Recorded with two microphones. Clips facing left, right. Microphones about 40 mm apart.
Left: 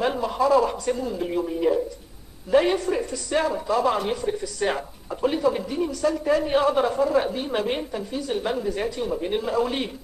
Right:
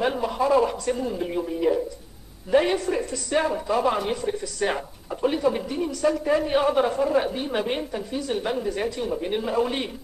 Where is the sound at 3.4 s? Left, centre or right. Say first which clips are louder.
Even; centre.